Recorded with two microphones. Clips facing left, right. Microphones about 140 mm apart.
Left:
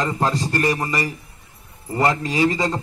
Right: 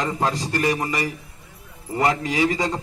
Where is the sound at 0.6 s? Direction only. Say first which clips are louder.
Right 2 dB; 15° right (ahead or behind).